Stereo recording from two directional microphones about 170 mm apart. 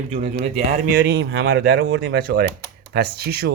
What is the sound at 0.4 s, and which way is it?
Speech, 35° right (ahead or behind).